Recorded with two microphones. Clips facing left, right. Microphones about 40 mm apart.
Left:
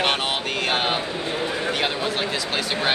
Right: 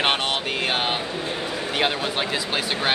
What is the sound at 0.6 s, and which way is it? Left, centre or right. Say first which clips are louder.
Speech: left 3 dB; centre.